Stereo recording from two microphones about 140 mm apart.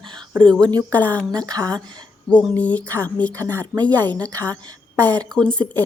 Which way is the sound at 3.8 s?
10° left (ahead or behind).